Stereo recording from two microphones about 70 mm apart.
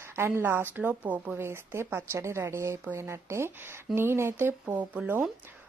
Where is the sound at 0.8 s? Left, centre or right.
Right.